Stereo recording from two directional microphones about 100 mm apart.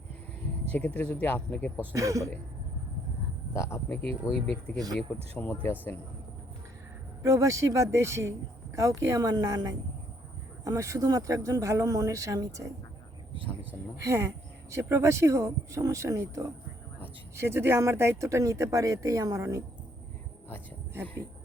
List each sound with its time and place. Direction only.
0.7 s speech: 15° left (ahead or behind)
1.9 s speech: 30° right (ahead or behind)
3.5 s speech: 30° left (ahead or behind)
4.0 s speech: 75° right (ahead or behind)
5.4 s speech: 20° left (ahead or behind)
7.2 s speech: 35° right (ahead or behind)
14.0 s speech: 30° right (ahead or behind)